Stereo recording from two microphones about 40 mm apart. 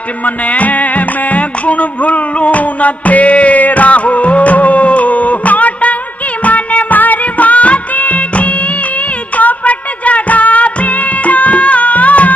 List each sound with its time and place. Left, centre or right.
0.2 s music: left
6.4 s music of bollywood: left
9.4 s music: left